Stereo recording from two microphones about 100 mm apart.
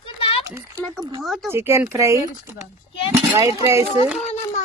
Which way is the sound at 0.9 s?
45° right (ahead or behind).